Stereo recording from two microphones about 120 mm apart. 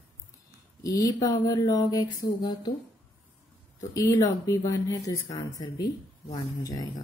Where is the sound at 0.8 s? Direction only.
30° left (ahead or behind).